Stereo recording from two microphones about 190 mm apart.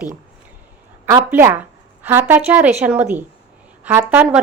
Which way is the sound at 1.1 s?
15° right (ahead or behind).